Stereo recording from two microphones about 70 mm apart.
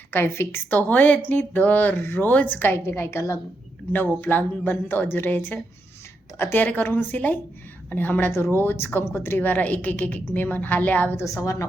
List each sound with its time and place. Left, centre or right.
0.1 s a woman's voice: left
3.9 s a woman's voice: left
11.2 s a woman's voice: left